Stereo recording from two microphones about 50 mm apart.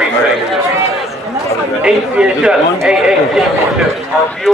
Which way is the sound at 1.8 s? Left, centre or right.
Centre.